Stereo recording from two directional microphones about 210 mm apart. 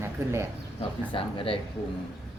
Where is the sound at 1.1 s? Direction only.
25° left (ahead or behind).